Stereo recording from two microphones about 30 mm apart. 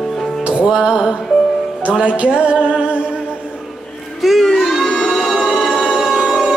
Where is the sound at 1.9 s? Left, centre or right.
Right.